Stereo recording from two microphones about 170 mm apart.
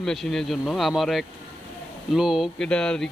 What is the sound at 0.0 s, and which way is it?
Speech, centre (ahead or behind).